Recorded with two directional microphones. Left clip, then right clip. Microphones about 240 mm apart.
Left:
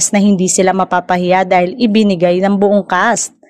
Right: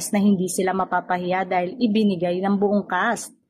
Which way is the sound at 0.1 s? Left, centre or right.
Left.